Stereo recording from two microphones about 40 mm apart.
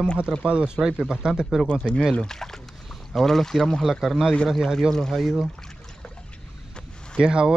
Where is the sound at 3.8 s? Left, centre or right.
Centre.